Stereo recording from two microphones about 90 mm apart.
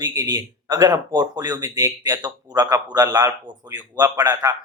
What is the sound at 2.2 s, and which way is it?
A man's voice, 50° right (ahead or behind).